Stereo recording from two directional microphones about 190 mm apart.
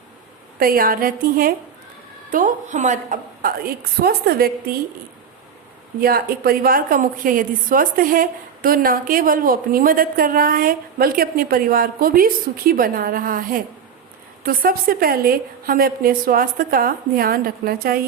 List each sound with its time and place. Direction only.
0.6 s a woman's voice: 50° right (ahead or behind)
4.0 s a woman's voice: 55° right (ahead or behind)
6.0 s a woman's voice: 50° right (ahead or behind)